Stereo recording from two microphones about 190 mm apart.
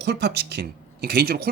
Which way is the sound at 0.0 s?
60° right (ahead or behind).